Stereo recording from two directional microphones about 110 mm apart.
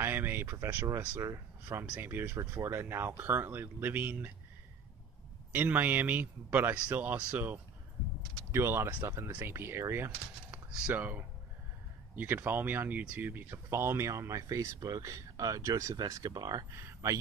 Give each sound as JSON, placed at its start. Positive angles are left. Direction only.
{"t": 0.0, "sound": "a sound", "side_deg": -20}
{"t": 0.8, "sound": "speech", "side_deg": -25}
{"t": 5.5, "sound": "a man's voice", "side_deg": -15}
{"t": 16.7, "sound": "speech", "side_deg": -25}